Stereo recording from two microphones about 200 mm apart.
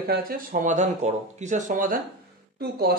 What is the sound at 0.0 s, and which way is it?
Speech, 45° right (ahead or behind).